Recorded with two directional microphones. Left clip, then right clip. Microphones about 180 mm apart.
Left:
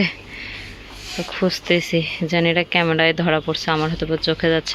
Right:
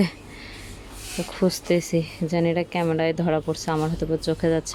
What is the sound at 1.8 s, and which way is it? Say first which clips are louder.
Speech: left 4 dB; 10° right (ahead or behind).